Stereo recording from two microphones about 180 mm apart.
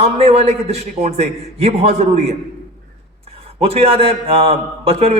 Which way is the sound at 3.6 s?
35° right (ahead or behind).